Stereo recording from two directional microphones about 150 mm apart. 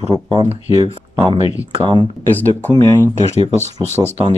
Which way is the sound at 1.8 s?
30° right (ahead or behind).